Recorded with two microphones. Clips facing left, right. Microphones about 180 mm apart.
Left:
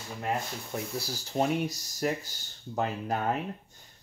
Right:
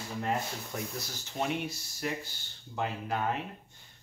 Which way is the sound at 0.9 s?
35° left (ahead or behind).